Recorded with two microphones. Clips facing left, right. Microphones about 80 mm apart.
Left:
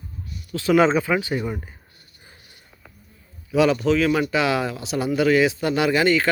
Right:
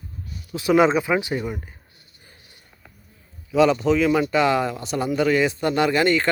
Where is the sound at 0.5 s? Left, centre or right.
Centre.